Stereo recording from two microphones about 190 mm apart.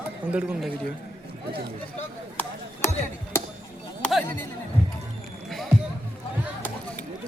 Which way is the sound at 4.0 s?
Centre (ahead or behind).